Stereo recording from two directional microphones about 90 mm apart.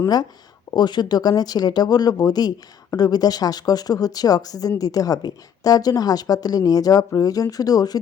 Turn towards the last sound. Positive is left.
turn(degrees=45)  # may be behind; listen again after turning